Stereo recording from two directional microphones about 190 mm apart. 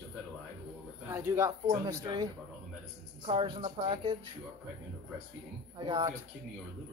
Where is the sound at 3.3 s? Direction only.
25° right (ahead or behind).